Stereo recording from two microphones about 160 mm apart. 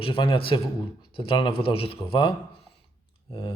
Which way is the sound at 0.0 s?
35° left (ahead or behind).